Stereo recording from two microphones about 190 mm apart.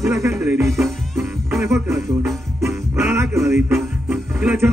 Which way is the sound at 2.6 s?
15° right (ahead or behind).